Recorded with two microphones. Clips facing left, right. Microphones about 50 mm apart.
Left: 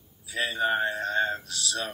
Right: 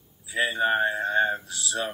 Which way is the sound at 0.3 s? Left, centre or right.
Centre.